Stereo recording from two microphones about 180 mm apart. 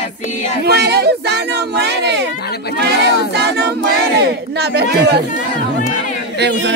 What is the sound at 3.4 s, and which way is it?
Choir, 70° right (ahead or behind).